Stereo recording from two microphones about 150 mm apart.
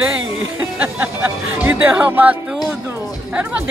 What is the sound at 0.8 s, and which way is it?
Speech, 10° right (ahead or behind).